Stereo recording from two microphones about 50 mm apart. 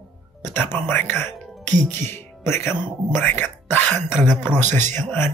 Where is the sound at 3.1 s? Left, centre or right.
Left.